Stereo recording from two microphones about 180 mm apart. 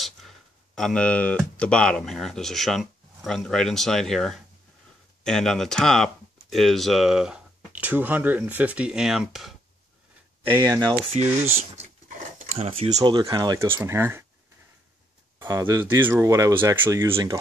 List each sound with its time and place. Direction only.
0.0 s speech: centre (ahead or behind)
10.4 s speech: 15° right (ahead or behind)
11.7 s a sound: 40° right (ahead or behind)
13.1 s speech: 20° right (ahead or behind)
15.3 s speech: 15° right (ahead or behind)